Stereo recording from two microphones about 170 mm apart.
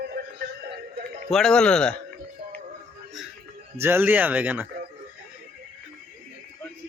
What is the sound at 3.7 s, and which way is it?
Speech, 15° right (ahead or behind).